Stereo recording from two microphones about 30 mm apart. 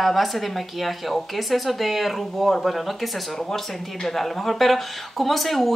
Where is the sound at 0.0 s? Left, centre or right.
Centre.